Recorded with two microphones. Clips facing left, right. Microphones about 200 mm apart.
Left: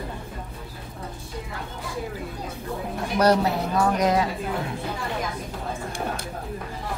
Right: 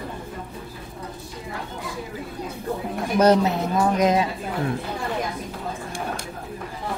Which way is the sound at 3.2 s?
20° right (ahead or behind).